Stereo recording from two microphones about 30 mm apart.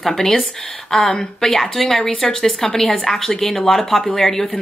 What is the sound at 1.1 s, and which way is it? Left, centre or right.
Speech, centre.